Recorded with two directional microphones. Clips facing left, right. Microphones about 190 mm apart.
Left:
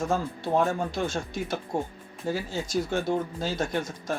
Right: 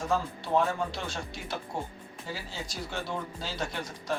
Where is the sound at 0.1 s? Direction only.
45° left (ahead or behind).